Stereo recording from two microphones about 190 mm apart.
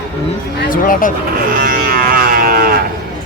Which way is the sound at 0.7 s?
45° left (ahead or behind).